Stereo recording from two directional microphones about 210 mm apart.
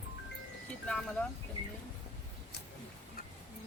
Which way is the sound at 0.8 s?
5° left (ahead or behind).